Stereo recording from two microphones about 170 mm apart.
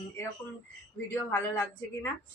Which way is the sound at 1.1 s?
10° left (ahead or behind).